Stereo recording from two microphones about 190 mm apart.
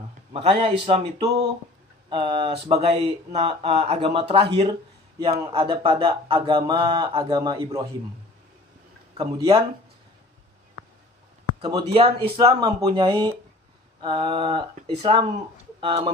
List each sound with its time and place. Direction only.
0.3 s speech: 30° right (ahead or behind)
9.1 s speech: 25° right (ahead or behind)
11.6 s speech: 30° right (ahead or behind)